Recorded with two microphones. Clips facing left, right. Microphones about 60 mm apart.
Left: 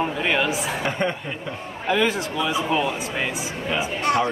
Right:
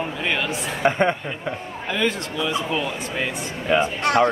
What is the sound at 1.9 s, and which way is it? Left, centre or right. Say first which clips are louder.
Speech: left 3 dB; centre.